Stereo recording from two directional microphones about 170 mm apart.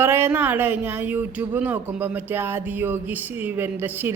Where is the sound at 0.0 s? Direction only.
15° right (ahead or behind).